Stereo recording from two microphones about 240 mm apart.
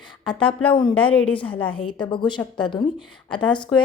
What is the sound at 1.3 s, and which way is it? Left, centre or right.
A woman's voice, left.